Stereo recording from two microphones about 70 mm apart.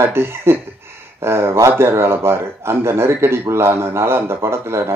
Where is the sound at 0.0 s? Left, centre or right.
Right.